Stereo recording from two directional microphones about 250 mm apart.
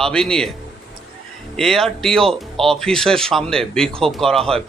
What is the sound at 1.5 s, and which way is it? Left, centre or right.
A man's voice, centre.